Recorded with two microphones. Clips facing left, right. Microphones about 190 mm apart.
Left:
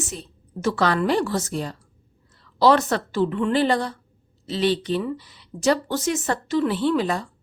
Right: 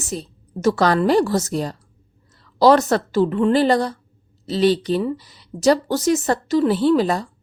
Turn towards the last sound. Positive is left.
turn(degrees=-40)  # may be behind; listen again after turning